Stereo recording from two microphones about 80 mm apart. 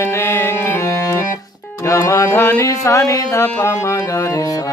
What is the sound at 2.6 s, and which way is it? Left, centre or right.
Speech, left.